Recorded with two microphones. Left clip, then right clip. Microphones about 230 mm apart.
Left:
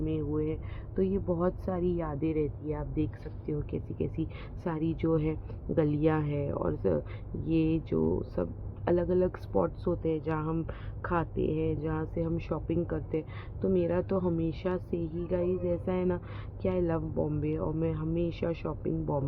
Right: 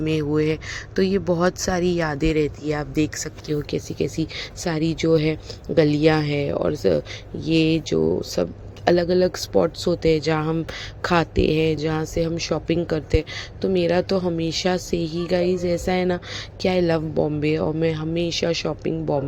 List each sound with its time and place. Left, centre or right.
0.0 s speech: right